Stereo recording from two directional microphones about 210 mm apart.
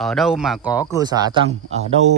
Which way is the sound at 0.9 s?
20° right (ahead or behind).